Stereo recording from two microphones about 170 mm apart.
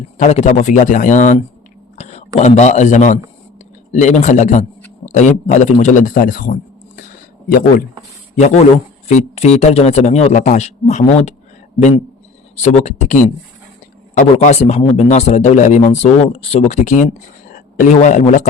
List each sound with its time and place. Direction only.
0.2 s a man's voice: 40° left (ahead or behind); by 7.0 s 60° left (ahead or behind)
8.4 s speech: 40° left (ahead or behind)